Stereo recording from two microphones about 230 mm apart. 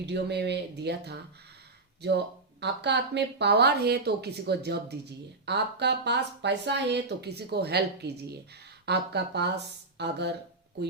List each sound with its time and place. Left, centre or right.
0.0 s speech: right